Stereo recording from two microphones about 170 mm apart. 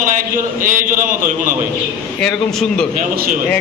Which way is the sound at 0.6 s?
50° right (ahead or behind).